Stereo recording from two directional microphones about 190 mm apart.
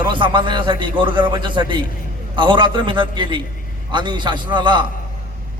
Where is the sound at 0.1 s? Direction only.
25° right (ahead or behind).